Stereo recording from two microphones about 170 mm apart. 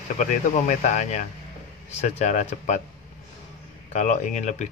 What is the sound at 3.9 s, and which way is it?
Speech, 45° left (ahead or behind).